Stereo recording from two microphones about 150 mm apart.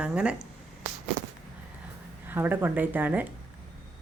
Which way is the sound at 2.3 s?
15° right (ahead or behind).